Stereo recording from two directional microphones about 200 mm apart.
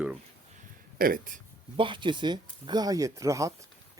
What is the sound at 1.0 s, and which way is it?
Speech, 45° right (ahead or behind).